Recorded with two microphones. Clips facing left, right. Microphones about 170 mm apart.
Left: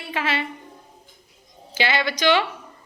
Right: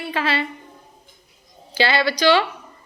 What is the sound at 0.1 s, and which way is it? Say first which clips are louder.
Speech: right 2 dB; 15° left (ahead or behind).